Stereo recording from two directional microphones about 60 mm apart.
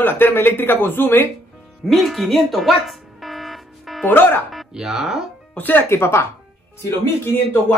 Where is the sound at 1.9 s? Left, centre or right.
Centre.